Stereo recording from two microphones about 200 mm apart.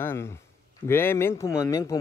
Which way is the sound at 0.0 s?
10° left (ahead or behind).